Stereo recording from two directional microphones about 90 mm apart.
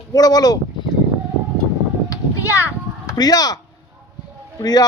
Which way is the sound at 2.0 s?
40° left (ahead or behind).